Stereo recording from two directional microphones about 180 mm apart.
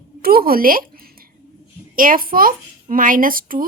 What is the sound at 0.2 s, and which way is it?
Speech, 55° right (ahead or behind).